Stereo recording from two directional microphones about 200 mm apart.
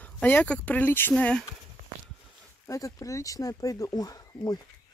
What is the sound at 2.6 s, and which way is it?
Speech, 15° left (ahead or behind).